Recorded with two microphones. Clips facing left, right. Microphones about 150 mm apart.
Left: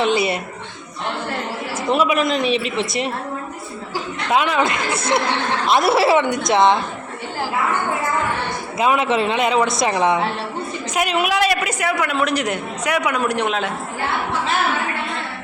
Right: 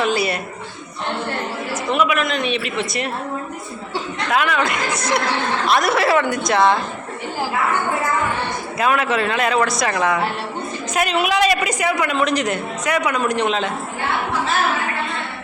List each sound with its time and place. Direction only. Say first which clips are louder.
0.0 s speech: left 1 dB; 25° left (ahead or behind)
1.9 s a man's voice: left 2 dB; 30° left (ahead or behind)
4.3 s speech: left 2 dB; 25° left (ahead or behind)
6.2 s a woman's voice: even; centre (ahead or behind)
6.5 s speech: left 1 dB; 20° left (ahead or behind)
8.8 s speech: left 1 dB; 20° left (ahead or behind)
10.9 s a man's voice: right 1 dB; 10° left (ahead or behind)